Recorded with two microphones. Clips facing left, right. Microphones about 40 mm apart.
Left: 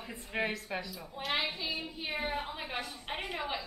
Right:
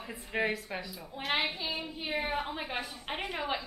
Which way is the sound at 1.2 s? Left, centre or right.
Right.